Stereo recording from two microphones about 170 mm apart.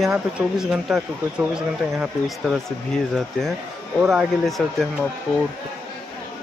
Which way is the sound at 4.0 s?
Centre (ahead or behind).